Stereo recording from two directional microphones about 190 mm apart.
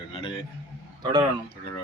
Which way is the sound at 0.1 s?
30° left (ahead or behind).